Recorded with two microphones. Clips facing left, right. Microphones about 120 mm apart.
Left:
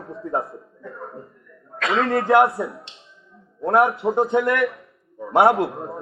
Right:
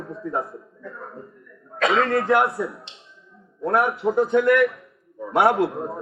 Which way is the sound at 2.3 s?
25° left (ahead or behind).